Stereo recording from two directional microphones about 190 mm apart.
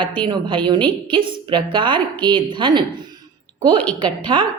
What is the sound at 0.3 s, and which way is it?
A woman's voice, 25° right (ahead or behind).